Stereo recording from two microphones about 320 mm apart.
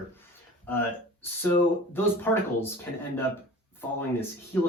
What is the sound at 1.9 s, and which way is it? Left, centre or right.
Speech, centre.